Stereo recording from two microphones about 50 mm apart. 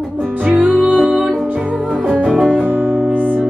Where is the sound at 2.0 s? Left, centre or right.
Right.